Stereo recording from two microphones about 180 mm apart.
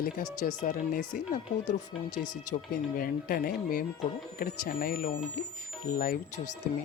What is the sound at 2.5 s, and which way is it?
Speech, 55° left (ahead or behind).